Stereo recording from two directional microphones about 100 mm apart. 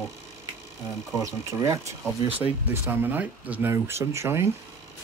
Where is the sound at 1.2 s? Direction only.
30° right (ahead or behind).